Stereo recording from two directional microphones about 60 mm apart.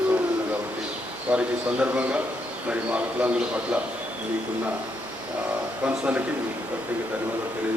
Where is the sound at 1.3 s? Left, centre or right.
Right.